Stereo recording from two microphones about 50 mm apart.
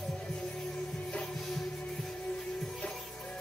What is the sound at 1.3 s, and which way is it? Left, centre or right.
Music, centre.